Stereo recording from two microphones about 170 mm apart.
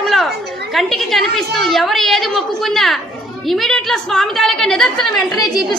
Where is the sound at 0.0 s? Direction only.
Centre (ahead or behind).